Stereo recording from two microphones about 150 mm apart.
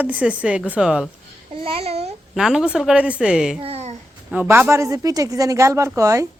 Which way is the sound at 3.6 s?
45° right (ahead or behind).